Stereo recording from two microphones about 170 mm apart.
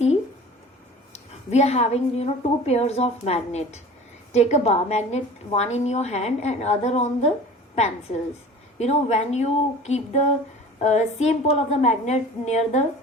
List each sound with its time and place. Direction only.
1.1 s a woman's voice: 40° left (ahead or behind)
8.8 s a woman's voice: 40° left (ahead or behind)